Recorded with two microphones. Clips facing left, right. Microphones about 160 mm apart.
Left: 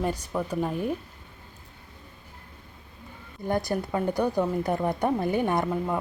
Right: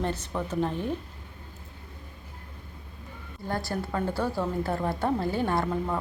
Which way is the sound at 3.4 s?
20° left (ahead or behind).